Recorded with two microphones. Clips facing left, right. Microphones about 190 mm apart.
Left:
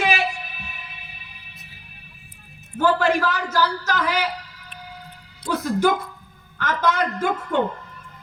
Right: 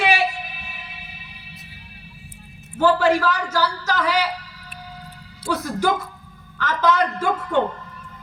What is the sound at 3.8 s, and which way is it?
Speech, 50° left (ahead or behind).